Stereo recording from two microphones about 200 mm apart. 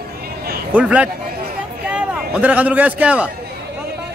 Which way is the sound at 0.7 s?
5° right (ahead or behind).